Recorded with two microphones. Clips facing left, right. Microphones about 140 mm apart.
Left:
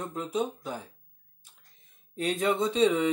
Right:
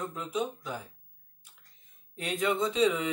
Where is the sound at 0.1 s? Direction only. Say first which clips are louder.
Left 3 dB; 35° left (ahead or behind).